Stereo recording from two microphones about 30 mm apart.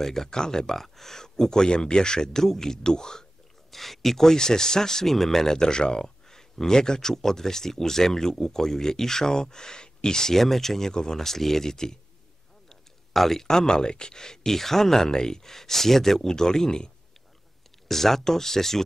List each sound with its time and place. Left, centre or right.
0.0 s speech: centre
0.7 s speech: centre
3.7 s speech: centre
4.4 s speech: left
10.9 s speech: left
11.1 s speech: centre
13.1 s speech: centre
13.7 s speech: left
17.8 s speech: centre